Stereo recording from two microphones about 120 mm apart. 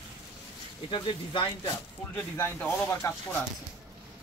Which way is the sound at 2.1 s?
20° left (ahead or behind).